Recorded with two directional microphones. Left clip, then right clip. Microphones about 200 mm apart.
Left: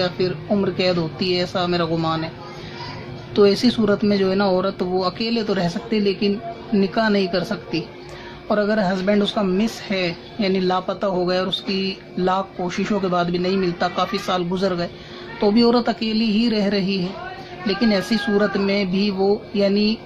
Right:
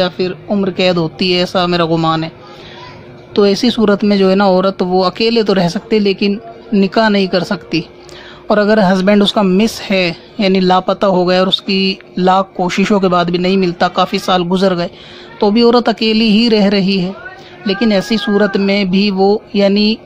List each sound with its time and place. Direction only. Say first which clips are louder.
0.0 s speech: right 6 dB; 50° right (ahead or behind)
3.3 s speech: right 5 dB; 50° right (ahead or behind)